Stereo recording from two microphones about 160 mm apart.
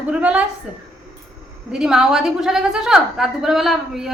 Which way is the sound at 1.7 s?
5° right (ahead or behind).